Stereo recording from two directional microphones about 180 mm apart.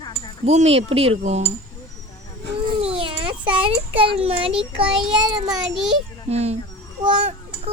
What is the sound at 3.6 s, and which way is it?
A child's voice, 30° right (ahead or behind).